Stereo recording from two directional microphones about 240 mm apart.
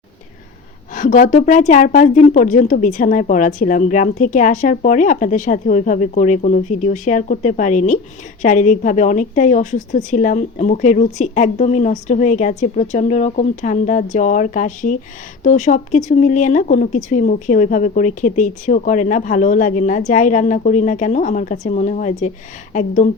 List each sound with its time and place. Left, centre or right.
0.9 s a woman's voice: left